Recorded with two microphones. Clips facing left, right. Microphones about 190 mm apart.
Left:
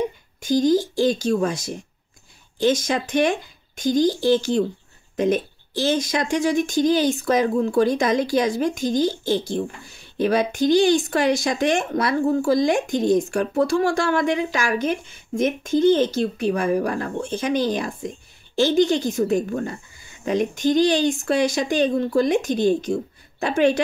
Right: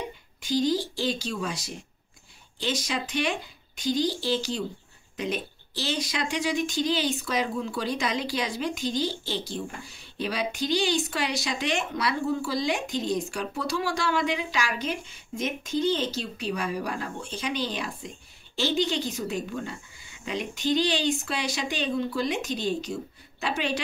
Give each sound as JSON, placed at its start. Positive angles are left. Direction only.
{"t": 0.4, "sound": "a woman's voice", "side_deg": 45}